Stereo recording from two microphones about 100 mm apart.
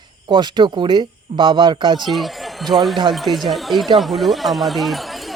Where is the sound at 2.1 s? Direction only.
Centre (ahead or behind).